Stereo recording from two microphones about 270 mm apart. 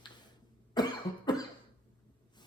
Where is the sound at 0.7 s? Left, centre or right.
Centre.